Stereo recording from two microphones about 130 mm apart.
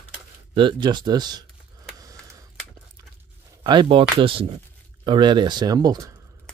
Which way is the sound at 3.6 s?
35° right (ahead or behind).